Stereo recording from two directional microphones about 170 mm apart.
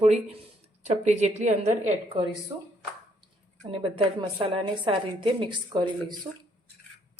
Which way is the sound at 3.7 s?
35° right (ahead or behind).